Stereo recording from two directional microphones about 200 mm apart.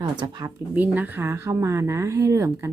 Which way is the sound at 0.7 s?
10° right (ahead or behind).